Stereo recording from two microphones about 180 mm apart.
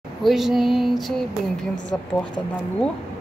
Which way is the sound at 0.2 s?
Centre (ahead or behind).